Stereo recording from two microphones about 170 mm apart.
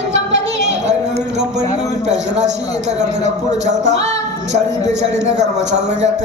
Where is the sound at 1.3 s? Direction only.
40° right (ahead or behind).